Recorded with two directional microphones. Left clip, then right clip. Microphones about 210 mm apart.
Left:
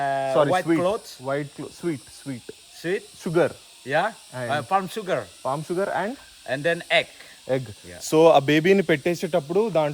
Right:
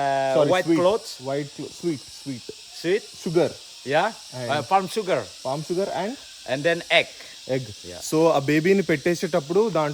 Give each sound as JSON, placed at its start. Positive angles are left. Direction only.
{"t": 0.0, "sound": "a sound", "side_deg": -20}
{"t": 0.8, "sound": "speech", "side_deg": -15}
{"t": 1.2, "sound": "speech", "side_deg": 0}
{"t": 2.8, "sound": "speech", "side_deg": -15}
{"t": 3.2, "sound": "speech", "side_deg": 0}
{"t": 3.8, "sound": "speech", "side_deg": -15}
{"t": 5.5, "sound": "speech", "side_deg": 0}
{"t": 6.4, "sound": "speech", "side_deg": -15}
{"t": 7.4, "sound": "speech", "side_deg": 0}